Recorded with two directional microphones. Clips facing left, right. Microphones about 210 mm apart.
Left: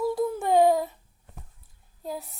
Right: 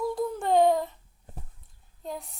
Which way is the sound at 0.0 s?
5° left (ahead or behind).